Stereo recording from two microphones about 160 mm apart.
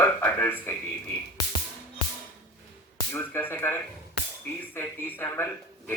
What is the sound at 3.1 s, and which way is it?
Speech, 15° left (ahead or behind).